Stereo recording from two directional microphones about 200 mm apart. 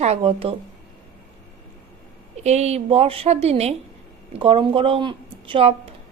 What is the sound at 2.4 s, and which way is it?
A woman's voice, 35° right (ahead or behind).